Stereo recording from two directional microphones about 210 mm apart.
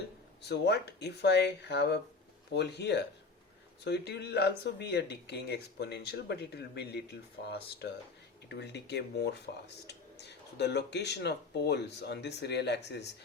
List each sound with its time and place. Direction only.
0.4 s speech: 50° left (ahead or behind)